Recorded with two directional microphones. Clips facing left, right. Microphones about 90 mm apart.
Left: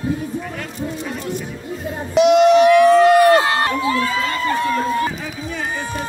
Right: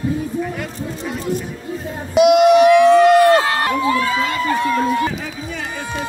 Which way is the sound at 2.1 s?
10° right (ahead or behind).